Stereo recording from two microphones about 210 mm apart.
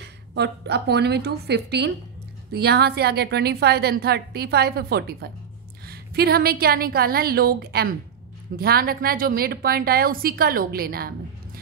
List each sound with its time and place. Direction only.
0.3 s a woman's voice: 55° right (ahead or behind)